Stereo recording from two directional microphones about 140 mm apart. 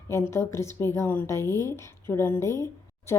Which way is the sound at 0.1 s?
20° left (ahead or behind).